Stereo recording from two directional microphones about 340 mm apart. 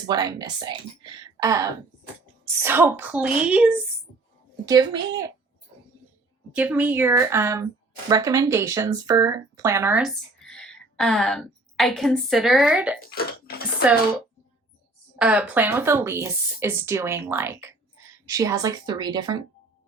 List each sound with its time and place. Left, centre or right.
0.0 s speech: centre
6.5 s speech: centre
13.0 s speech: left
15.1 s speech: centre